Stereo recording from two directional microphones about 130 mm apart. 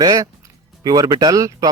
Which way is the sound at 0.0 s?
30° right (ahead or behind).